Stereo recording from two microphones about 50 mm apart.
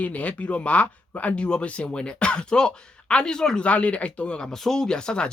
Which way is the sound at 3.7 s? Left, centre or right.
Left.